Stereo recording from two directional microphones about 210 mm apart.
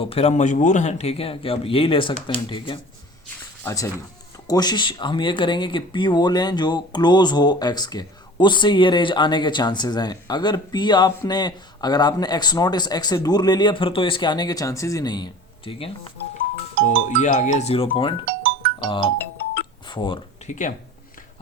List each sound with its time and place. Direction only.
0.0 s speech: 30° left (ahead or behind)
3.6 s speech: 15° left (ahead or behind)
16.8 s speech: 35° left (ahead or behind)
20.5 s speech: 35° left (ahead or behind)